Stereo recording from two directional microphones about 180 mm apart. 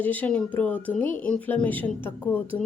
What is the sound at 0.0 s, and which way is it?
Speech, 10° left (ahead or behind).